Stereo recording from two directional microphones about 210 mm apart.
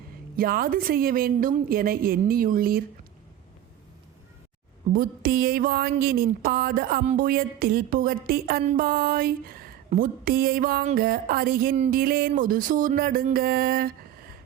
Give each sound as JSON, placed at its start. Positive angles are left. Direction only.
{"t": 0.3, "sound": "speech", "side_deg": -45}
{"t": 4.9, "sound": "speech", "side_deg": -45}